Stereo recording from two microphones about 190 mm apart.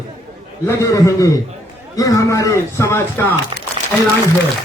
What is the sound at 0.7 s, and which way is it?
A man's voice, 15° left (ahead or behind).